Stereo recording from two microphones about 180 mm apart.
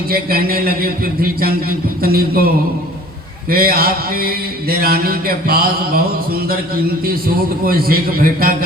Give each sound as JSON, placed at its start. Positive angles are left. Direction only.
{"t": 0.1, "sound": "mantra", "side_deg": -55}
{"t": 3.5, "sound": "mantra", "side_deg": -55}